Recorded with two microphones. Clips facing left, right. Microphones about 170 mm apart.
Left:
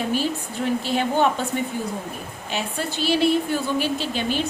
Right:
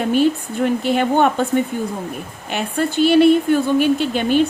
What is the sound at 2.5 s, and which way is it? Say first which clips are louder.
A woman's voice: right 7 dB; 55° right (ahead or behind).